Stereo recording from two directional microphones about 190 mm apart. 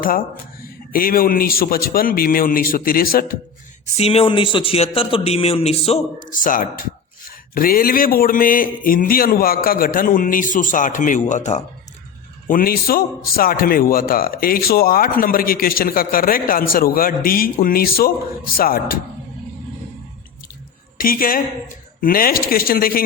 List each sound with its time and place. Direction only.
0.0 s a man's voice: 50° left (ahead or behind)
3.9 s a man's voice: 30° left (ahead or behind); by 18.9 s 50° left (ahead or behind)
21.0 s a man's voice: 50° left (ahead or behind)